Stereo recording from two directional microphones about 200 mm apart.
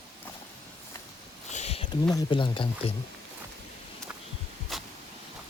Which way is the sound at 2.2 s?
25° left (ahead or behind).